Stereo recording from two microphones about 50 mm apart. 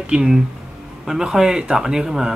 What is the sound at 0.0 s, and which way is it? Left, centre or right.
Speech, centre.